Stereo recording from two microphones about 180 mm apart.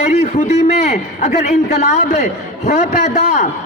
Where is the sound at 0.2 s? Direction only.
35° left (ahead or behind).